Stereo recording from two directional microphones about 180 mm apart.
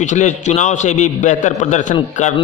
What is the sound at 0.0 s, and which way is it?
A man's voice, 40° left (ahead or behind).